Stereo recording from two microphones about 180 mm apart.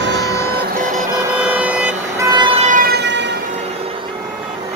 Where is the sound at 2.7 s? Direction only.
55° right (ahead or behind); by 3.3 s 75° right (ahead or behind).